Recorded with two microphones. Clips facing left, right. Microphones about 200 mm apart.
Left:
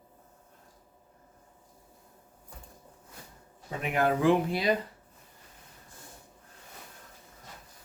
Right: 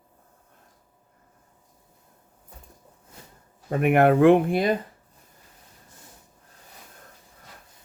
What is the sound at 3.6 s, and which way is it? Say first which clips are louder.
Speech: right 9 dB; 60° right (ahead or behind).